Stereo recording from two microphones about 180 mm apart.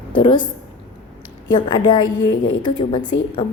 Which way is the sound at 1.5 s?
25° left (ahead or behind).